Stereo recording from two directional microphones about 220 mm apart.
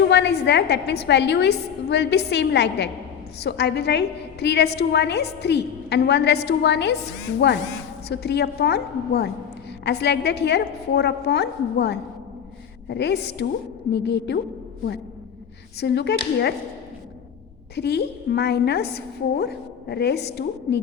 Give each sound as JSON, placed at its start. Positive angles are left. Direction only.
{"t": 0.0, "sound": "a woman's voice", "side_deg": 50}
{"t": 8.0, "sound": "a woman's voice", "side_deg": 50}
{"t": 15.8, "sound": "a woman's voice", "side_deg": 50}
{"t": 17.7, "sound": "a woman's voice", "side_deg": 50}